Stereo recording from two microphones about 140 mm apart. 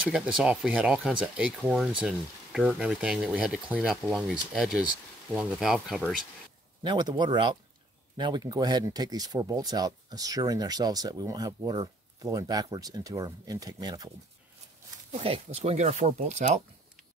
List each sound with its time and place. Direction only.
0.1 s speech: 5° right (ahead or behind)
6.8 s speech: 30° right (ahead or behind)
15.1 s speech: 45° right (ahead or behind)